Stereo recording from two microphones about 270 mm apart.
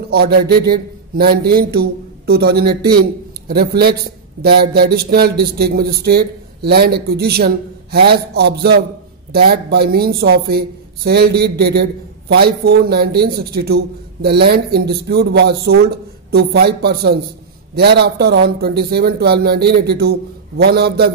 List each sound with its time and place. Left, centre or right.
0.1 s a man's voice: right